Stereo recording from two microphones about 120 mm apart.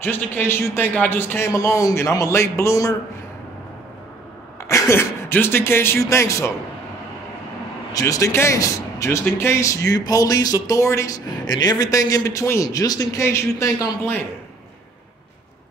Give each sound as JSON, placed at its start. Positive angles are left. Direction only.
{"t": 0.0, "sound": "a man's voice", "side_deg": 20}
{"t": 4.6, "sound": "speech", "side_deg": 25}
{"t": 7.9, "sound": "a man's voice", "side_deg": 30}
{"t": 11.4, "sound": "a man's voice", "side_deg": 35}